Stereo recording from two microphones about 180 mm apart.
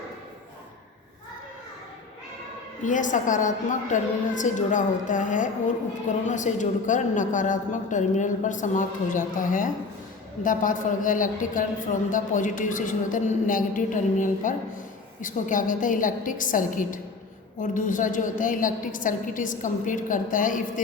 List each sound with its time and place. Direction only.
2.8 s a woman's voice: 45° left (ahead or behind)